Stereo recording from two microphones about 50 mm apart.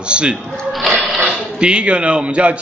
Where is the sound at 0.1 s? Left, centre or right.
Right.